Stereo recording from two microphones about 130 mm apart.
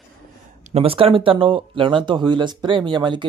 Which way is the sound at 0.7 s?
50° right (ahead or behind).